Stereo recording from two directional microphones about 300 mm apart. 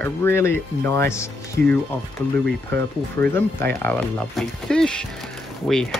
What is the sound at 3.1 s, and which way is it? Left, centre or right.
Speech, centre.